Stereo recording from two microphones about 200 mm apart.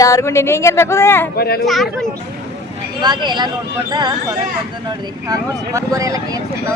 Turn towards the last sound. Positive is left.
turn(degrees=-15)  # may be behind; listen again after turning